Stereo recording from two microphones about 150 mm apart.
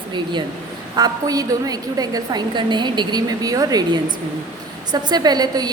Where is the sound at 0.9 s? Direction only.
25° right (ahead or behind).